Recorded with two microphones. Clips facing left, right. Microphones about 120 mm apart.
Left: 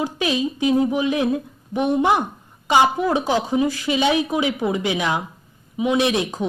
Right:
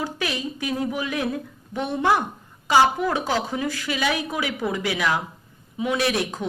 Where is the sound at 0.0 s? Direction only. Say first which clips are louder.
Left 6 dB; 20° left (ahead or behind).